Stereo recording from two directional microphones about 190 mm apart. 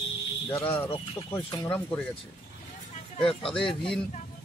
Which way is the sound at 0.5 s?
15° left (ahead or behind).